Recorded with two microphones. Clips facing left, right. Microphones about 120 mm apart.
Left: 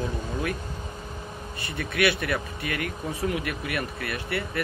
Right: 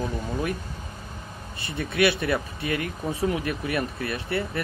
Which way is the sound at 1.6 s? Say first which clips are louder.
Right 2 dB; 25° right (ahead or behind).